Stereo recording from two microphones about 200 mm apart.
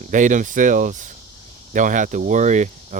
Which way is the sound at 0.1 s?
40° right (ahead or behind).